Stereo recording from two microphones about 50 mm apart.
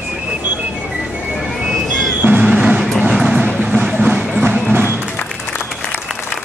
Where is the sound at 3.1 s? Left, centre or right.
Centre.